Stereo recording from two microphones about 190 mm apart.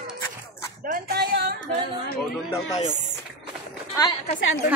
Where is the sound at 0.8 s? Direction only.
60° right (ahead or behind).